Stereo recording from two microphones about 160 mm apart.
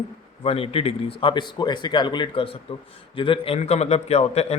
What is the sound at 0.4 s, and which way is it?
Speech, 35° left (ahead or behind).